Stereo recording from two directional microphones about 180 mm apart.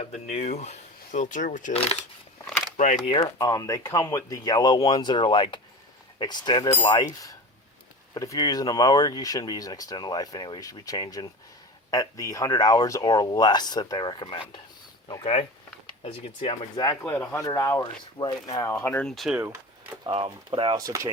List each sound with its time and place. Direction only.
0.0 s speech: 35° left (ahead or behind)
3.1 s speech: 25° left (ahead or behind)
17.1 s speech: 10° left (ahead or behind)
20.1 s speech: 30° right (ahead or behind)